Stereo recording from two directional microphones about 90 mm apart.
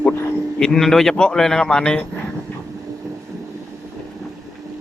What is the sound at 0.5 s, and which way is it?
Speech, 10° left (ahead or behind).